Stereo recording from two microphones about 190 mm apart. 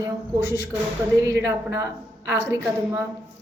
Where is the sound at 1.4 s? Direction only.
15° right (ahead or behind).